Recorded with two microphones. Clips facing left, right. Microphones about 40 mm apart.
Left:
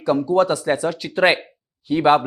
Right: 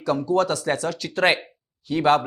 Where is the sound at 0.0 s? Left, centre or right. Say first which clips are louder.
Left 4 dB; centre.